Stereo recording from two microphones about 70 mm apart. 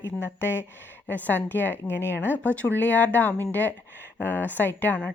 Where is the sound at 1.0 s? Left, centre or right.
Left.